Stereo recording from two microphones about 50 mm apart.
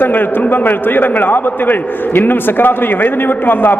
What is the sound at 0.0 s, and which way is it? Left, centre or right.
A man's voice, left.